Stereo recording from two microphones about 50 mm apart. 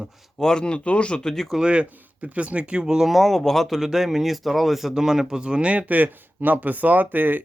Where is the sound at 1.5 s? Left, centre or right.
Right.